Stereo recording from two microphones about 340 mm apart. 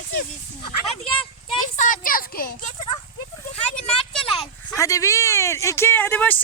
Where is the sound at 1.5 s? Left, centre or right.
Left.